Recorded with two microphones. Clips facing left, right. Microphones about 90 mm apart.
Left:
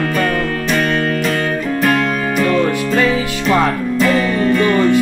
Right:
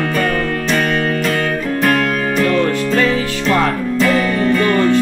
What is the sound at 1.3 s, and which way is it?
Music, centre (ahead or behind).